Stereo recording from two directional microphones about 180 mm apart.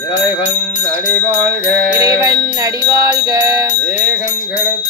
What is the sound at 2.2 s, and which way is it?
Music, 20° right (ahead or behind).